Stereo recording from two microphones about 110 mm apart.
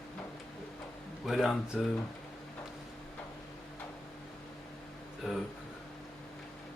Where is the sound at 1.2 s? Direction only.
Centre (ahead or behind).